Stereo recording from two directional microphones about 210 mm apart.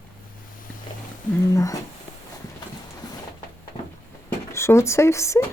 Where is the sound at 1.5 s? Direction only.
15° left (ahead or behind).